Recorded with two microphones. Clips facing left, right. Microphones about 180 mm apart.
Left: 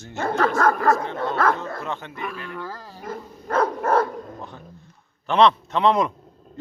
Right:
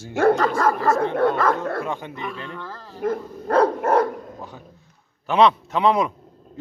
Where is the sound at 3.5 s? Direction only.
35° right (ahead or behind).